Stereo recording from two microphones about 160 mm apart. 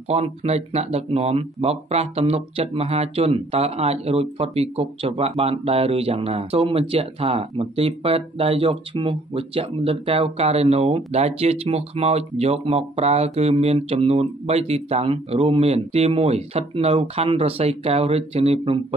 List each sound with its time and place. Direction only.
0.1 s speech: 40° right (ahead or behind)